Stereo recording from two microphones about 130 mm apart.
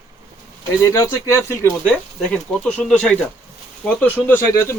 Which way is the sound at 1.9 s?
10° left (ahead or behind).